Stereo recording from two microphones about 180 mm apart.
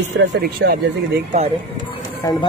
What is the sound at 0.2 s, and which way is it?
Speech, 65° right (ahead or behind).